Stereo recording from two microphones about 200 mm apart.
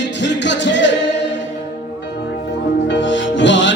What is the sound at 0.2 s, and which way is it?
Music, 60° left (ahead or behind).